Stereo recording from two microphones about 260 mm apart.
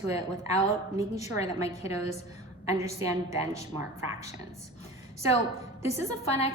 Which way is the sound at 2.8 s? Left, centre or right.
Centre.